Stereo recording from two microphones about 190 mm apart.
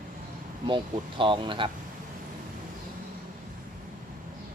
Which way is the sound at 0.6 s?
25° right (ahead or behind).